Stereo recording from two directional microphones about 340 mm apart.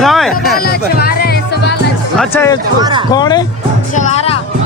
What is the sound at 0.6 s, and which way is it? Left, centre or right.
Music, left.